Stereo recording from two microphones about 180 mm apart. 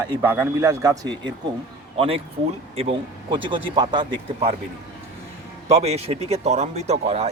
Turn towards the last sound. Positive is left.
turn(degrees=-35)  # may be behind; listen again after turning